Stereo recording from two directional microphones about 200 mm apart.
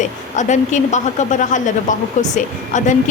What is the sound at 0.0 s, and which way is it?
A woman's voice, 35° left (ahead or behind).